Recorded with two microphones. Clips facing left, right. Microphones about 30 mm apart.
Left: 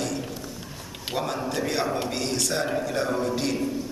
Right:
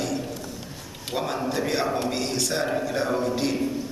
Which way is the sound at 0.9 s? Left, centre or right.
Centre.